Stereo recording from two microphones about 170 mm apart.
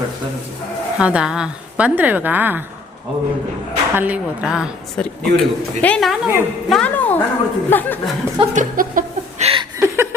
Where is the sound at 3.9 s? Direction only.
10° right (ahead or behind); by 8.0 s 10° left (ahead or behind).